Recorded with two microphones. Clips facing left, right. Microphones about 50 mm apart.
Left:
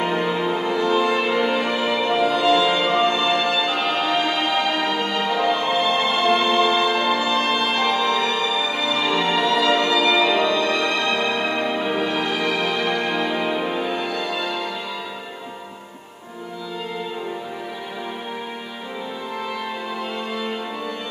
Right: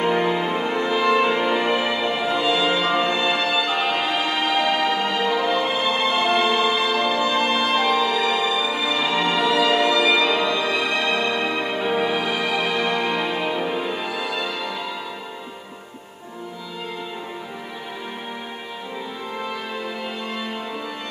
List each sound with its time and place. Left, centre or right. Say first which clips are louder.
0.0 s music: right 1 dB; centre
1.4 s music: even; centre